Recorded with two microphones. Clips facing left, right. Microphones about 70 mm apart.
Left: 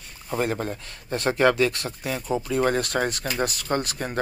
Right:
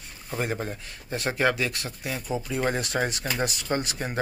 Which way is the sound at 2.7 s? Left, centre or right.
Centre.